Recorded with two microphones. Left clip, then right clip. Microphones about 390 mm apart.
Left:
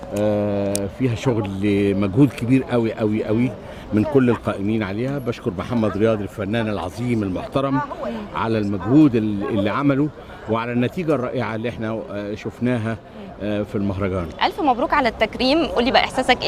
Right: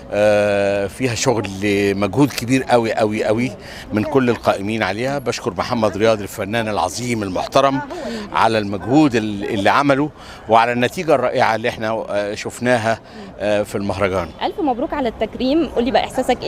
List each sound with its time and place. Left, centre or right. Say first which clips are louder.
0.2 s speech: right 7 dB; right
3.9 s speech: right 1 dB; right
14.4 s a woman's voice: left 4 dB; centre